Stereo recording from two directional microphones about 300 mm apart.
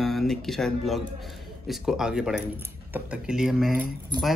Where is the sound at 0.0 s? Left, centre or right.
Centre.